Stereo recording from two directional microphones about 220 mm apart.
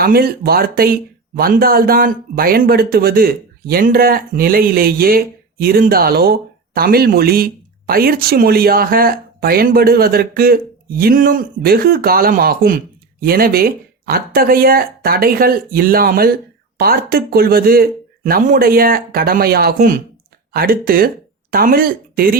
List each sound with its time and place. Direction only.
0.0 s speech: 45° right (ahead or behind)